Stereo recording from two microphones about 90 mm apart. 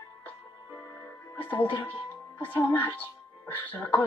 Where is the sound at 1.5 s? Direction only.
20° left (ahead or behind).